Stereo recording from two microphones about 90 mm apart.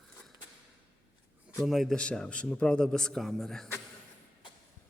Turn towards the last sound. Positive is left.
turn(degrees=5)  # may be behind; listen again after turning